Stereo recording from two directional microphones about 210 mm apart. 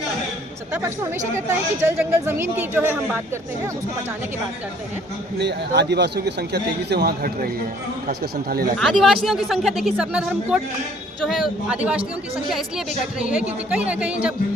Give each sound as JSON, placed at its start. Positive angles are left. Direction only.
{"t": 0.7, "sound": "a woman's voice", "side_deg": -15}
{"t": 5.4, "sound": "a man's voice", "side_deg": -55}
{"t": 8.8, "sound": "a woman's voice", "side_deg": 0}